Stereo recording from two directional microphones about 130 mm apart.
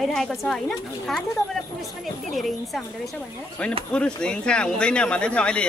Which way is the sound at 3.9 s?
5° left (ahead or behind).